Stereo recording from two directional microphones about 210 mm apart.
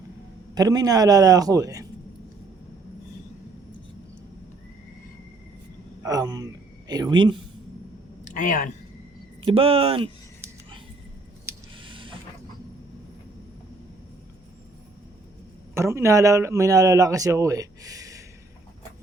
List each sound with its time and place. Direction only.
0.5 s a man's voice: 15° right (ahead or behind)
6.0 s speech: 15° right (ahead or behind)
8.2 s speech: 40° left (ahead or behind)
9.4 s speech: 25° right (ahead or behind)
11.8 s a sound: 25° right (ahead or behind)
15.7 s a man's voice: 10° right (ahead or behind)